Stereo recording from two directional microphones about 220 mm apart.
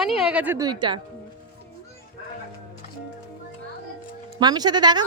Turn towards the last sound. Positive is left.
turn(degrees=-20)  # may be behind; listen again after turning